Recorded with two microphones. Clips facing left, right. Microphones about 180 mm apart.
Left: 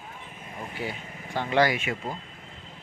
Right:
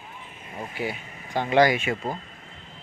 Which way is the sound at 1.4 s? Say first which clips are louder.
Right 4 dB; 15° right (ahead or behind).